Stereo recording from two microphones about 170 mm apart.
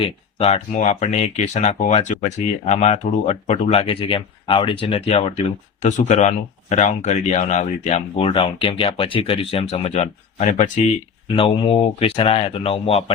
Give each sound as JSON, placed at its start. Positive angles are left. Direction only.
{"t": 0.0, "sound": "speech", "side_deg": 35}
{"t": 11.3, "sound": "speech", "side_deg": 30}